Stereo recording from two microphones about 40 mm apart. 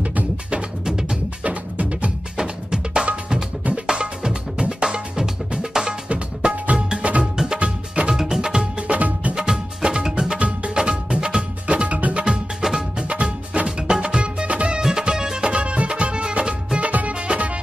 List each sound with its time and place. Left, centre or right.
0.0 s music: right
2.3 s music: right
6.0 s music: right
8.1 s music: centre
8.8 s music: right
9.3 s music: centre; by 12.3 s right
12.3 s music: centre
13.1 s music: right
14.8 s music: centre; by 17.5 s right